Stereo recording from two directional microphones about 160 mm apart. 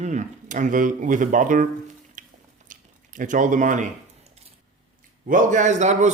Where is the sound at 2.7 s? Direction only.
55° right (ahead or behind).